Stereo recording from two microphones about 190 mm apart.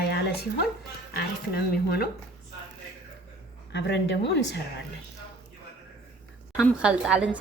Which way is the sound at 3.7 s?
65° left (ahead or behind).